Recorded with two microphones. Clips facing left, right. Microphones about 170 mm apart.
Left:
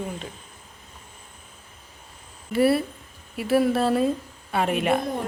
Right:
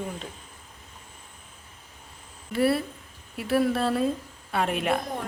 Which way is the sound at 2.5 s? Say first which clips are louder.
Left 3 dB; 5° left (ahead or behind).